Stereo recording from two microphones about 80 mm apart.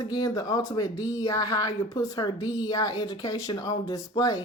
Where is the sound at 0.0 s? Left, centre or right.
Left.